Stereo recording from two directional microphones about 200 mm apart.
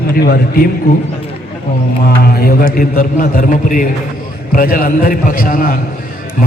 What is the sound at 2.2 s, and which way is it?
A man's voice, 50° left (ahead or behind).